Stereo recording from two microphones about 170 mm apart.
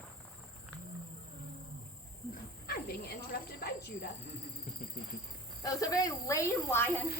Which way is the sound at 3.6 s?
65° left (ahead or behind).